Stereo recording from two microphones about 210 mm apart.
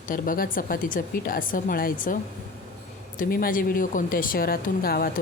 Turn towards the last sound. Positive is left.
turn(degrees=45)  # may be behind; listen again after turning